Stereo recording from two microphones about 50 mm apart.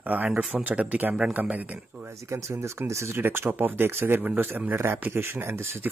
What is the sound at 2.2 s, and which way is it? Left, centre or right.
Speech, right.